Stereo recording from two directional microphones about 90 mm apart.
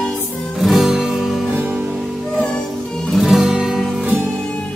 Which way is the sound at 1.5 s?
15° right (ahead or behind).